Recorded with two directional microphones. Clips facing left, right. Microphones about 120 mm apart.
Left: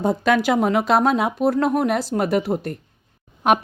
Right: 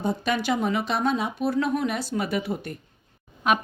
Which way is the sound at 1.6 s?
70° left (ahead or behind).